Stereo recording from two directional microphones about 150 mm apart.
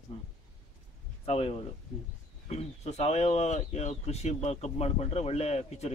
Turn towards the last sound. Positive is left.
turn(degrees=45)  # may be behind; listen again after turning